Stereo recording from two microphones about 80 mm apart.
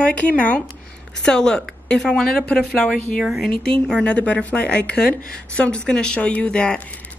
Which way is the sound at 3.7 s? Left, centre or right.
Centre.